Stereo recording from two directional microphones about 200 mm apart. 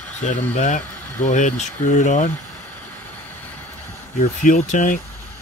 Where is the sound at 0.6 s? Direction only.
35° left (ahead or behind).